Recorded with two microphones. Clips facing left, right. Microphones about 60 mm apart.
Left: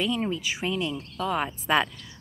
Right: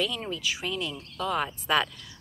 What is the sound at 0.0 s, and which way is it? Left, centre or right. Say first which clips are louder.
Speech: left 3 dB; left.